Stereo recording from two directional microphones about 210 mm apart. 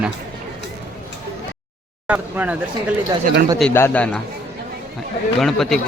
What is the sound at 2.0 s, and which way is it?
Speech, 10° right (ahead or behind).